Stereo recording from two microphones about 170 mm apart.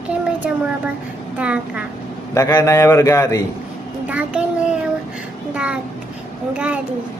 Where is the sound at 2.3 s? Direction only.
15° left (ahead or behind).